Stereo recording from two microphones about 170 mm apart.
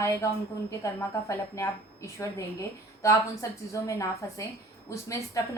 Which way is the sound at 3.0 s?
20° left (ahead or behind).